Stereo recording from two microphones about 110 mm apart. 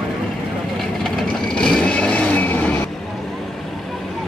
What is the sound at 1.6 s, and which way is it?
Vehicle, 10° left (ahead or behind).